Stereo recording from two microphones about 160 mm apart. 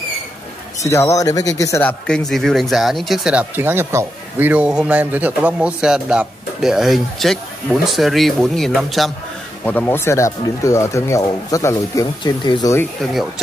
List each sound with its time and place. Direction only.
0.8 s speech: 20° left (ahead or behind); by 9.1 s centre (ahead or behind)
9.7 s speech: 10° left (ahead or behind); by 12.7 s 25° left (ahead or behind)
13.0 s speech: centre (ahead or behind)